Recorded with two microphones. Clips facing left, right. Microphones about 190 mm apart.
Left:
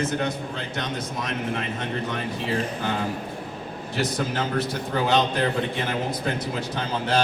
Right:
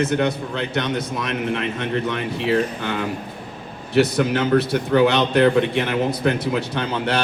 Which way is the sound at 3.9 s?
65° right (ahead or behind).